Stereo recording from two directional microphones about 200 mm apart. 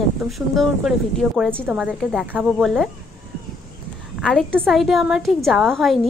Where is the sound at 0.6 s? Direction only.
Centre (ahead or behind).